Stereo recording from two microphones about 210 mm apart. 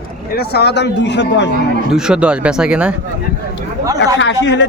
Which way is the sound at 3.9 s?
60° left (ahead or behind).